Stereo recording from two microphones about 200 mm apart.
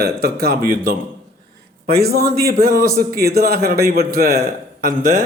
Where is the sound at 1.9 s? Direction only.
50° right (ahead or behind).